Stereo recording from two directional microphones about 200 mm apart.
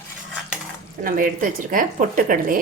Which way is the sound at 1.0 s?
45° right (ahead or behind).